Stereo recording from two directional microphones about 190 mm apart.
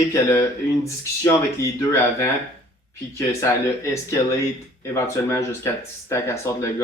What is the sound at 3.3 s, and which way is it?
Speech, 15° left (ahead or behind).